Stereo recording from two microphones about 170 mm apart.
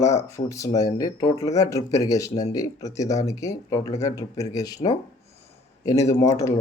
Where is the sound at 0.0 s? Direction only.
15° left (ahead or behind).